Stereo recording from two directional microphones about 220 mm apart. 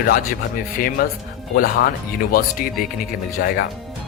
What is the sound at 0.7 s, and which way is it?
A man's voice, 40° left (ahead or behind).